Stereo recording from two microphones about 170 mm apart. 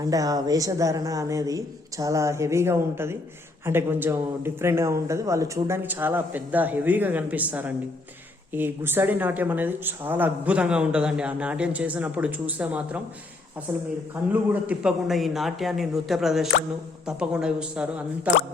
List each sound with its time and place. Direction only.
0.0 s a man's voice: 20° right (ahead or behind); by 18.0 s 5° right (ahead or behind)